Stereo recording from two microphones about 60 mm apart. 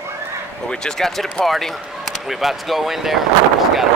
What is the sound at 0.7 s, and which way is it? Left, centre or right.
Speech, centre.